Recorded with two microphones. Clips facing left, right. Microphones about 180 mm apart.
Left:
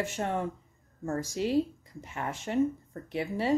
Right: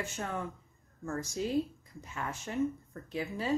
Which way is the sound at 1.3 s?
90° left.